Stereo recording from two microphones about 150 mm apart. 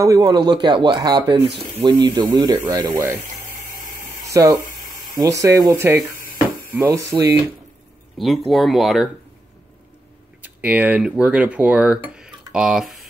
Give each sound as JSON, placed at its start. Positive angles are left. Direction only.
{"t": 0.0, "sound": "speech", "side_deg": -25}
{"t": 2.5, "sound": "speech", "side_deg": -15}
{"t": 3.4, "sound": "a sound", "side_deg": -65}
{"t": 4.3, "sound": "speech", "side_deg": -20}
{"t": 8.5, "sound": "speech", "side_deg": 0}
{"t": 10.4, "sound": "speech", "side_deg": -10}